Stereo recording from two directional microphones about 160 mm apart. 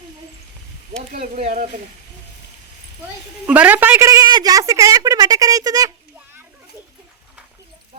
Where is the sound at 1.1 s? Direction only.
65° right (ahead or behind).